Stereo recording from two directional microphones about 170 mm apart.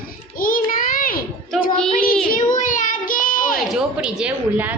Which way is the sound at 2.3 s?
50° left (ahead or behind).